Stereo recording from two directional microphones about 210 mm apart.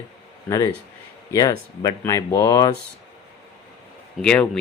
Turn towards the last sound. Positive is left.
turn(degrees=5)  # may be behind; listen again after turning